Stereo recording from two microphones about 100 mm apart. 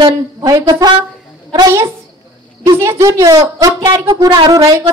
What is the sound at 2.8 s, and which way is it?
Speech, 30° right (ahead or behind).